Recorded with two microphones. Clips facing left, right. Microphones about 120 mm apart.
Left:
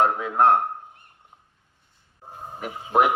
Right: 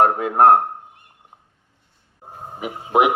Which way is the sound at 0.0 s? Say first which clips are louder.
Right 5 dB; 55° right (ahead or behind).